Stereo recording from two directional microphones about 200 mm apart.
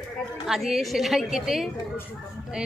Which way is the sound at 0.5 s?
Centre (ahead or behind).